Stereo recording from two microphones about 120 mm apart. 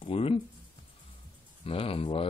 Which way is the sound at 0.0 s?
55° left (ahead or behind).